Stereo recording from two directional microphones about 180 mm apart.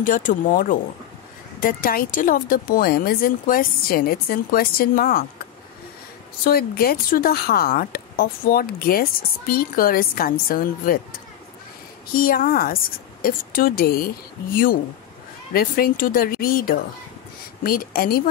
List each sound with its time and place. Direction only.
0.0 s speech: 45° left (ahead or behind)
6.4 s a woman's voice: 55° left (ahead or behind)
12.1 s a woman's voice: 55° left (ahead or behind)